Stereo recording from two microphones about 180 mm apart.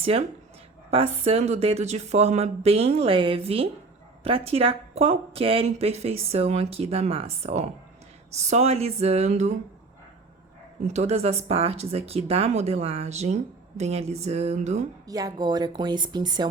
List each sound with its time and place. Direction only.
0.9 s speech: 35° right (ahead or behind)
10.8 s speech: 35° right (ahead or behind)
15.0 s a woman's voice: 20° right (ahead or behind)